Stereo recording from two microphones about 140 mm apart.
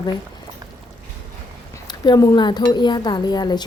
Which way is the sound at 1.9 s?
25° left (ahead or behind).